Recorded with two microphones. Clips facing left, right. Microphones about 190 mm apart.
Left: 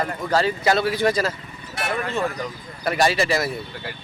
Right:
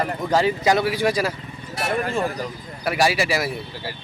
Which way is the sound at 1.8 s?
40° right (ahead or behind).